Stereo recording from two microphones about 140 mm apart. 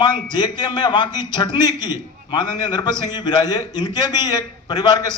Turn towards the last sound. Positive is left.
turn(degrees=30)  # may be behind; listen again after turning